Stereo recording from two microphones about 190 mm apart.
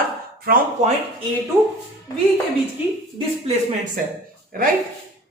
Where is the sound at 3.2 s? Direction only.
25° right (ahead or behind).